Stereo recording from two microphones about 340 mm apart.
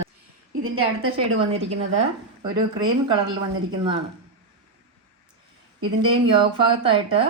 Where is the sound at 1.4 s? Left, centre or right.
Centre.